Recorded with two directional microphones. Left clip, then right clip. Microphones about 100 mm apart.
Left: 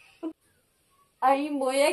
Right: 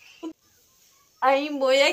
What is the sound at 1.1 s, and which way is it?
Speech, 35° left (ahead or behind).